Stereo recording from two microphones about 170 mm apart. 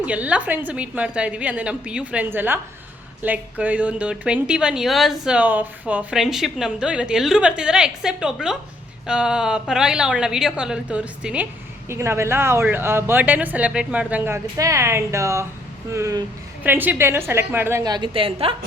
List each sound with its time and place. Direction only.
0.0 s a woman's voice: 10° right (ahead or behind); by 18.5 s 35° right (ahead or behind)